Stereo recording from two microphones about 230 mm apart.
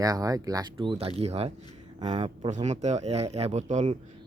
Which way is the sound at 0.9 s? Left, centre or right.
Right.